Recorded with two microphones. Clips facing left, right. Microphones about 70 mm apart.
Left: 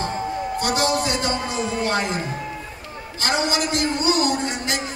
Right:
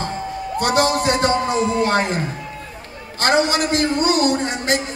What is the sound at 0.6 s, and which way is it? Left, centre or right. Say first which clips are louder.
A man's voice: right 5 dB; right.